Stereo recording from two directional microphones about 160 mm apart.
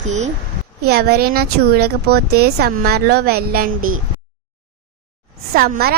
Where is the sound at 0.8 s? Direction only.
85° right; by 3.6 s 70° right (ahead or behind).